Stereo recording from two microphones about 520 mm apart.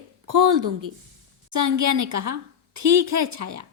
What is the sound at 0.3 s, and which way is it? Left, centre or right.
Speech, right.